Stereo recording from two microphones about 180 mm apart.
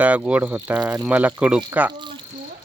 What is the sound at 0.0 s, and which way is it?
Speech, 5° right (ahead or behind).